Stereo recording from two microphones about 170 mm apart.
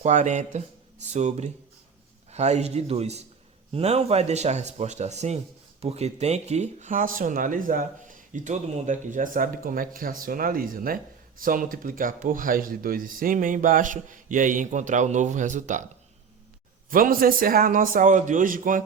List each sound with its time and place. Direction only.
0.0 s speech: 45° right (ahead or behind)
16.9 s a man's voice: 55° right (ahead or behind)